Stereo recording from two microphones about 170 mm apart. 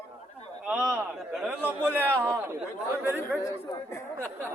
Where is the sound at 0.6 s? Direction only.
5° right (ahead or behind).